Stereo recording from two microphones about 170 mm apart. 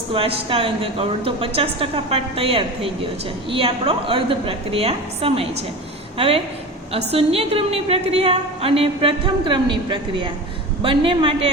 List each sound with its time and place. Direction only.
0.1 s a woman's voice: 35° right (ahead or behind)